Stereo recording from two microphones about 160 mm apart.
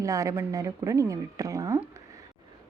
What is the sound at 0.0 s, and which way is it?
A woman's voice, 20° right (ahead or behind).